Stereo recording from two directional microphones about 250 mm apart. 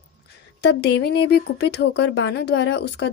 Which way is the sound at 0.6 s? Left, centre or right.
Left.